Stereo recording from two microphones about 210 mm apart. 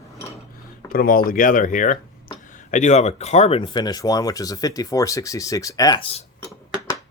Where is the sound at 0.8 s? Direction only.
45° left (ahead or behind); by 6.2 s 25° left (ahead or behind).